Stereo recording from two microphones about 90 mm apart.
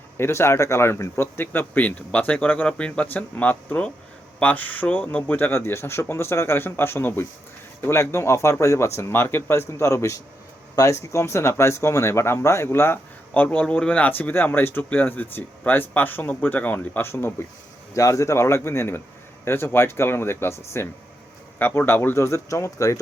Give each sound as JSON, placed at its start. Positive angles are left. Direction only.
{"t": 0.2, "sound": "speech", "side_deg": 30}